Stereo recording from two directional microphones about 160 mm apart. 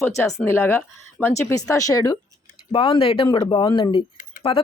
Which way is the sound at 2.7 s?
35° left (ahead or behind).